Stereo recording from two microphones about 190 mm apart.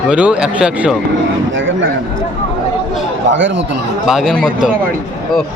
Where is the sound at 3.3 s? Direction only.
80° right.